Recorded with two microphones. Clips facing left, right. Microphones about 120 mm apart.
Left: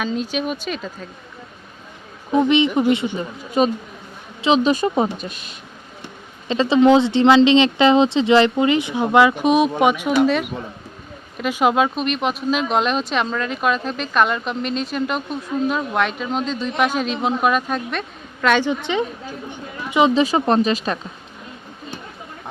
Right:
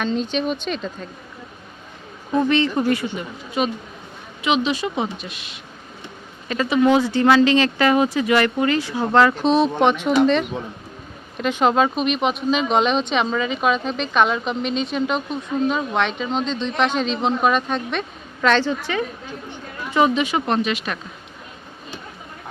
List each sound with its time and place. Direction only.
0.0 s speech: 5° left (ahead or behind)
2.3 s speech: 20° left (ahead or behind)
3.6 s speech: 40° left (ahead or behind)
6.5 s speech: 25° left (ahead or behind)
19.5 s chatter: 15° left (ahead or behind)
20.1 s speech: 35° left (ahead or behind)